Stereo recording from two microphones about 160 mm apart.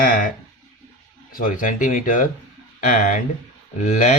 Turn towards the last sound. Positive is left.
turn(degrees=50)  # may be behind; listen again after turning